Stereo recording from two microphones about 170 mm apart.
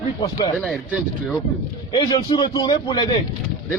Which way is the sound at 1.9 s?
25° left (ahead or behind).